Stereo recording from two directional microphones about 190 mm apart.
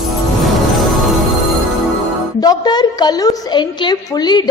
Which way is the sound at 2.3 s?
20° left (ahead or behind).